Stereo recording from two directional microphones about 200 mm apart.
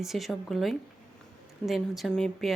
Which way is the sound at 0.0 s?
Centre (ahead or behind).